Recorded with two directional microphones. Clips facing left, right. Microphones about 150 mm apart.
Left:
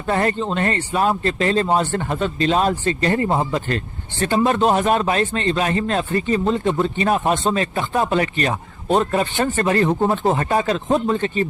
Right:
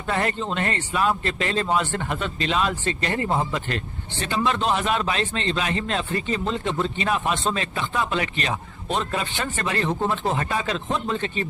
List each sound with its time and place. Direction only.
0.1 s speech: 40° left (ahead or behind)